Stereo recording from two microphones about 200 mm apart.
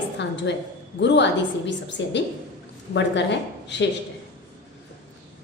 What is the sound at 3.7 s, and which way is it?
Speech, 60° left (ahead or behind).